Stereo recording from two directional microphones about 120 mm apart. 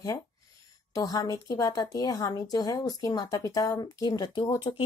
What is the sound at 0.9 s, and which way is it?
Speech, 30° left (ahead or behind).